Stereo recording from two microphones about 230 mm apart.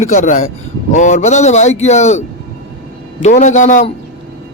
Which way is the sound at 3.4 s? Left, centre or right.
Left.